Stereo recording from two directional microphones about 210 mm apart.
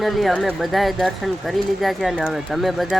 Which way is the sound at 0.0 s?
Centre (ahead or behind).